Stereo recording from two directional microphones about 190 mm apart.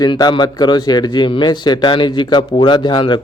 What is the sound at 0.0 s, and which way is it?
A man's voice, 20° left (ahead or behind).